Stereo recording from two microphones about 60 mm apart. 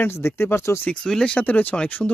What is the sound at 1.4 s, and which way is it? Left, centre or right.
Speech, left.